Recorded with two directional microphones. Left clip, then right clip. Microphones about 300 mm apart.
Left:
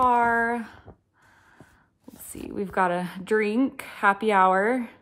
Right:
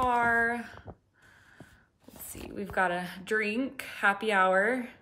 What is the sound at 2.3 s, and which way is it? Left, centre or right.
Speech, centre.